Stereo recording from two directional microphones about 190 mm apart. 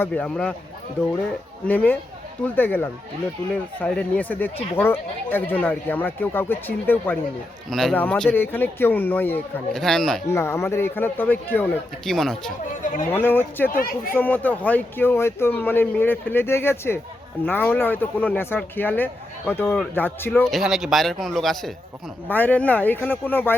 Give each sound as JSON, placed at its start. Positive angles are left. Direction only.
{"t": 0.0, "sound": "speech", "side_deg": 5}
{"t": 1.6, "sound": "speech", "side_deg": 10}
{"t": 10.2, "sound": "speech", "side_deg": 15}
{"t": 12.8, "sound": "speech", "side_deg": 45}
{"t": 13.1, "sound": "speech", "side_deg": 10}
{"t": 13.7, "sound": "speech", "side_deg": 50}
{"t": 14.1, "sound": "speech", "side_deg": 10}
{"t": 20.5, "sound": "speech", "side_deg": 0}